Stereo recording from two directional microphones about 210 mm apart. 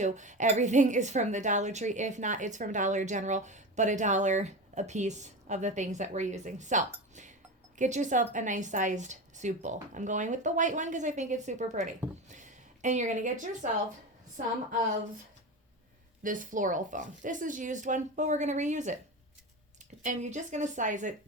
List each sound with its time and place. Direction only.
0.0 s a woman's voice: 35° right (ahead or behind)
16.2 s a woman's voice: 40° right (ahead or behind)
20.0 s a woman's voice: 35° right (ahead or behind)